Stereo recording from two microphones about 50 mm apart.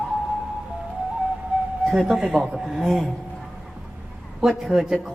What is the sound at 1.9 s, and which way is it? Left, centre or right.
Speech, centre.